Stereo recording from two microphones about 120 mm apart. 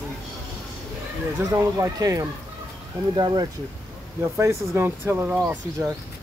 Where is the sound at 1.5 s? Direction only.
25° right (ahead or behind).